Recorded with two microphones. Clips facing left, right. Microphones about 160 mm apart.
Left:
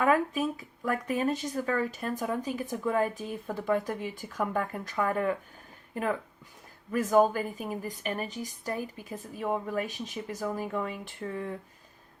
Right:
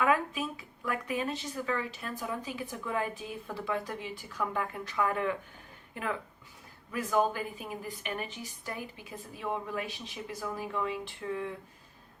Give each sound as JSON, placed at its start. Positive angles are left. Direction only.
{"t": 0.0, "sound": "a woman's voice", "side_deg": 45}